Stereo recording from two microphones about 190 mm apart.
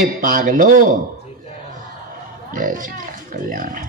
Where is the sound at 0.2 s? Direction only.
45° right (ahead or behind).